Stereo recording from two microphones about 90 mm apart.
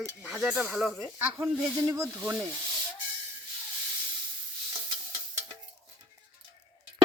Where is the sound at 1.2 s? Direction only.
20° right (ahead or behind).